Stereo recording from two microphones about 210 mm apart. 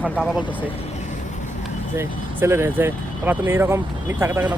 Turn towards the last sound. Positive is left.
turn(degrees=-10)  # may be behind; listen again after turning